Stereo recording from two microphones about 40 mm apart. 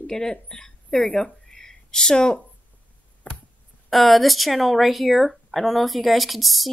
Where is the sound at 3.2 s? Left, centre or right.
Left.